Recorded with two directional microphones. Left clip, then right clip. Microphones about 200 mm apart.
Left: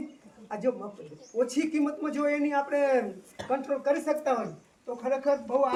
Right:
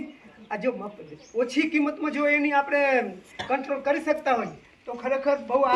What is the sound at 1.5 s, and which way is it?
Speech, 15° left (ahead or behind).